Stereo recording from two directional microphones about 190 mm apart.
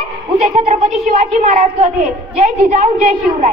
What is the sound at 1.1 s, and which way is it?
Speech, 45° right (ahead or behind).